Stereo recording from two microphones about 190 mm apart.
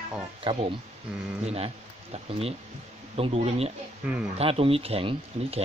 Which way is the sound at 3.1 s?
30° right (ahead or behind).